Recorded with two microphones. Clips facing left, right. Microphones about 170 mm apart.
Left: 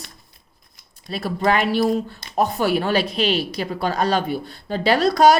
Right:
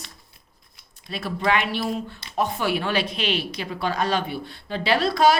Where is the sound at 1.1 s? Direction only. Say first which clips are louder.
Left 3 dB; 40° left (ahead or behind).